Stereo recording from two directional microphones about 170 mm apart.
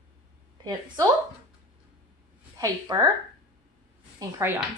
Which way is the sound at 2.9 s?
25° right (ahead or behind).